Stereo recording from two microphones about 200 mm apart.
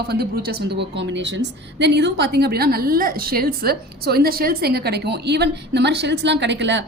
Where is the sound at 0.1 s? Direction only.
50° right (ahead or behind).